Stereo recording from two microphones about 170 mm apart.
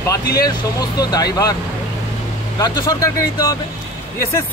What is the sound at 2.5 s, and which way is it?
Speech, 25° left (ahead or behind).